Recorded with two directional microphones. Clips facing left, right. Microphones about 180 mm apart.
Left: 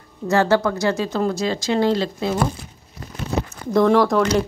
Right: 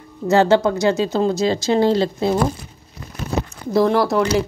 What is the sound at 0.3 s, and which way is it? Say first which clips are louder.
Speech: right 3 dB; 20° right (ahead or behind).